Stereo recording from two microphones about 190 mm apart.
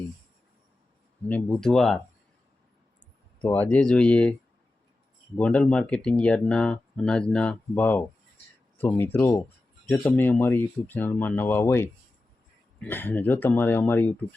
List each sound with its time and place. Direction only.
1.3 s speech: 5° left (ahead or behind)
3.4 s speech: 10° left (ahead or behind)
5.4 s speech: 5° left (ahead or behind)